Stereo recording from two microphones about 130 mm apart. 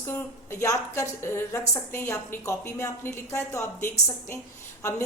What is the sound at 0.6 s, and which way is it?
A woman's voice, 25° left (ahead or behind).